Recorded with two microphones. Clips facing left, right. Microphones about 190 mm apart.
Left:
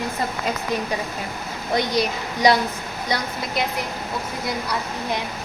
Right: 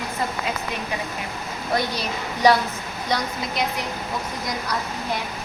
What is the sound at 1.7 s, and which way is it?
Speech, 15° left (ahead or behind).